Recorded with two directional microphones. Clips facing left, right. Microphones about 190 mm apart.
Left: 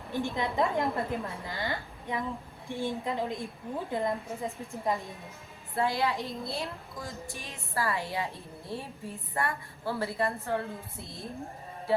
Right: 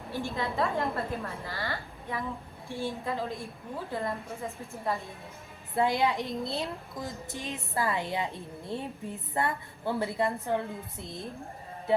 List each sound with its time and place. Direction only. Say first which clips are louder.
0.1 s a woman's voice: left 2 dB; 15° left (ahead or behind)
5.7 s a woman's voice: right 2 dB; 20° right (ahead or behind)
11.9 s music: right 1 dB; 20° right (ahead or behind)